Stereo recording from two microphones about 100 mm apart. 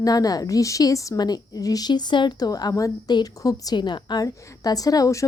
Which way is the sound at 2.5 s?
40° left (ahead or behind).